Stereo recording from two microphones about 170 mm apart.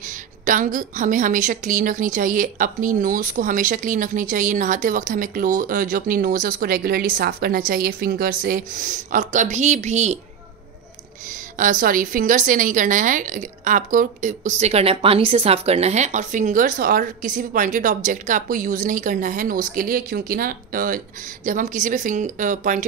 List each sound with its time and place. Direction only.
0.0 s a woman's voice: 50° right (ahead or behind)
11.5 s a woman's voice: 50° right (ahead or behind)
14.6 s a woman's voice: 35° right (ahead or behind)